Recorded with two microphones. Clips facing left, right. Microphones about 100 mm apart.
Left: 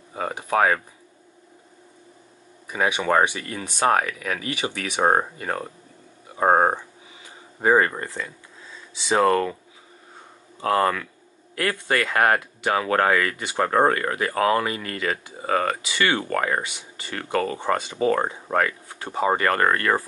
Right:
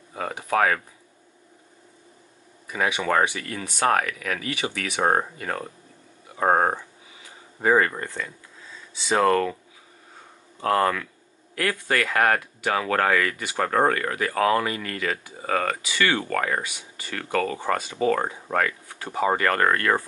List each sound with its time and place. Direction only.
0.1 s speech: 20° left (ahead or behind)
2.7 s speech: 20° left (ahead or behind)
7.9 s speech: 10° left (ahead or behind)
10.6 s speech: 5° left (ahead or behind)
11.5 s speech: 20° left (ahead or behind)